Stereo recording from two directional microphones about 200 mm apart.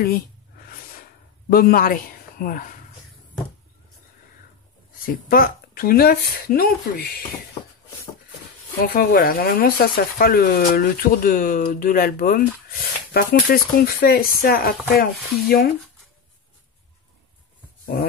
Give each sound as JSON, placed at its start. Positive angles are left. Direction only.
{"t": 1.5, "sound": "a man's voice", "side_deg": 45}
{"t": 5.0, "sound": "speech", "side_deg": 45}
{"t": 8.8, "sound": "speech", "side_deg": 45}